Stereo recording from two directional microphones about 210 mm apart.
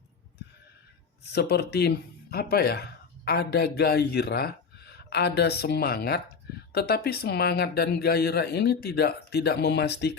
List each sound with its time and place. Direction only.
1.3 s speech: 50° left (ahead or behind)